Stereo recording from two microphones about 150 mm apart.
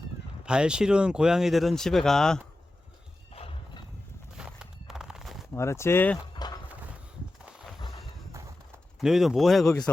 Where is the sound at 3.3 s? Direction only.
40° left (ahead or behind).